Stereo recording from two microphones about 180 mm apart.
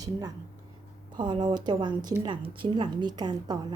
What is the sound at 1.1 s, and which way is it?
Speech, 25° right (ahead or behind).